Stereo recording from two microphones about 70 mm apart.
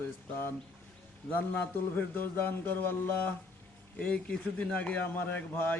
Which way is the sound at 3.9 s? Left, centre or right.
Centre.